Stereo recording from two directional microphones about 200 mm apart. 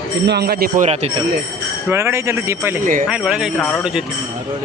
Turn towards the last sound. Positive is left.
turn(degrees=5)  # may be behind; listen again after turning